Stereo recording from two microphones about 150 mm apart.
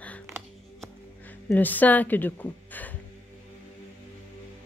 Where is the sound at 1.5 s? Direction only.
10° left (ahead or behind).